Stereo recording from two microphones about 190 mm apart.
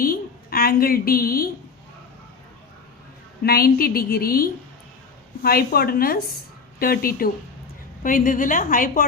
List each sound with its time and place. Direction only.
0.0 s a woman's voice: 50° left (ahead or behind)
3.4 s a woman's voice: 55° left (ahead or behind)